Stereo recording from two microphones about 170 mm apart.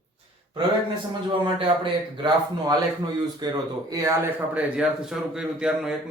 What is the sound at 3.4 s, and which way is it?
Speech, 20° right (ahead or behind).